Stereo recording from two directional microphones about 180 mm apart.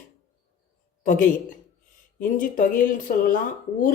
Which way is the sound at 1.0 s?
45° left (ahead or behind).